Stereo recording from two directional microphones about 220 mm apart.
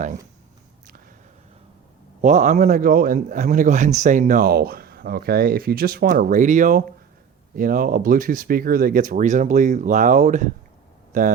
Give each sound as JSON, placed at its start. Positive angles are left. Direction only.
{"t": 2.2, "sound": "a man's voice", "side_deg": -30}